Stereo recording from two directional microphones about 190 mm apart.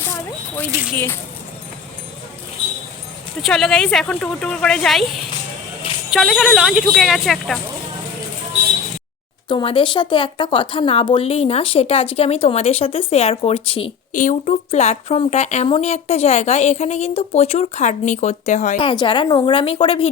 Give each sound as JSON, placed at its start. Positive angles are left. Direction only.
{"t": 0.1, "sound": "a sound", "side_deg": 10}
{"t": 0.7, "sound": "speech", "side_deg": -10}
{"t": 3.4, "sound": "speech", "side_deg": 0}
{"t": 6.1, "sound": "speech", "side_deg": 0}
{"t": 9.5, "sound": "speech", "side_deg": 25}
{"t": 14.1, "sound": "speech", "side_deg": 40}
{"t": 18.8, "sound": "speech", "side_deg": 25}